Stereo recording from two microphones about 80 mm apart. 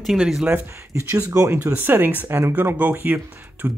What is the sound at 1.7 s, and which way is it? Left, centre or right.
Speech, right.